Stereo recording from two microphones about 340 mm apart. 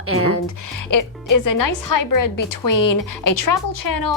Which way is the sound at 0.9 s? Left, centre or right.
Left.